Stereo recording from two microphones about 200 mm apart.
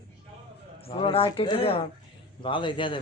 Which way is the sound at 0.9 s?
25° left (ahead or behind).